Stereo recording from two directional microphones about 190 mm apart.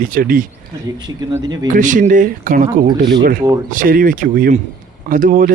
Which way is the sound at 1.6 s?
45° right (ahead or behind).